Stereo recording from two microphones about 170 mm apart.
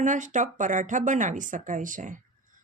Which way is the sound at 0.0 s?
45° right (ahead or behind).